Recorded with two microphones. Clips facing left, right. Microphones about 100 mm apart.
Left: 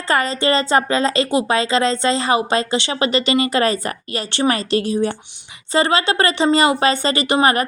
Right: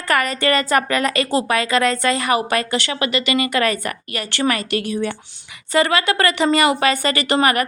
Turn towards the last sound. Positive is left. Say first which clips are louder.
# left 1 dB
turn(degrees=25)  # may be behind; listen again after turning